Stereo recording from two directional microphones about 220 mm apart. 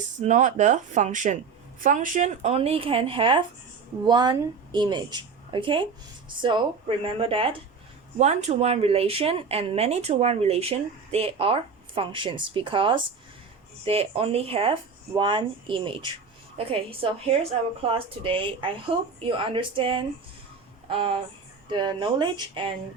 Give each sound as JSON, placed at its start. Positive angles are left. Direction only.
{"t": 0.2, "sound": "speech", "side_deg": -35}
{"t": 21.7, "sound": "speech", "side_deg": -20}